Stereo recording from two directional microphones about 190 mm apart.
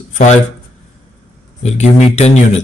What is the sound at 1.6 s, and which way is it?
Speech, 35° left (ahead or behind).